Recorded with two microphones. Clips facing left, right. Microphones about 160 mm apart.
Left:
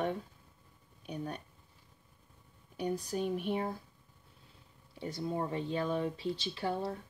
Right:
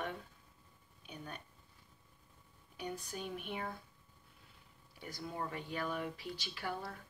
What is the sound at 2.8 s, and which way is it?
Speech, 35° left (ahead or behind).